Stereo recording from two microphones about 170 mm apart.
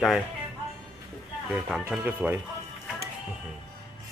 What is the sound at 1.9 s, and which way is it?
Speech, 10° right (ahead or behind).